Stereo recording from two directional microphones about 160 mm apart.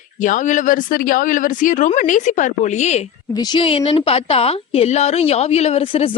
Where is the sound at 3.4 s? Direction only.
30° left (ahead or behind).